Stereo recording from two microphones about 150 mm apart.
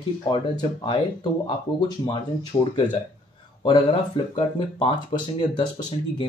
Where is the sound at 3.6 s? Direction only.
30° left (ahead or behind).